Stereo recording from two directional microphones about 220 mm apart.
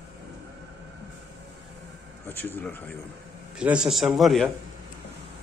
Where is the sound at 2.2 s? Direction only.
10° left (ahead or behind).